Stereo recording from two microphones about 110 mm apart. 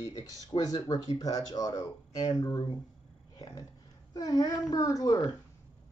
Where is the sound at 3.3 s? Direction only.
35° left (ahead or behind).